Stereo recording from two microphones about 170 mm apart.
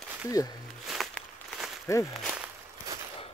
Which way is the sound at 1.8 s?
15° left (ahead or behind).